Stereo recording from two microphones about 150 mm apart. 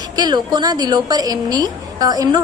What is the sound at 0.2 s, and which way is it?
A woman's voice, 30° right (ahead or behind).